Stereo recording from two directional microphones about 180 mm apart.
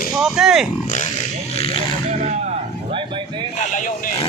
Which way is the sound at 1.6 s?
35° left (ahead or behind).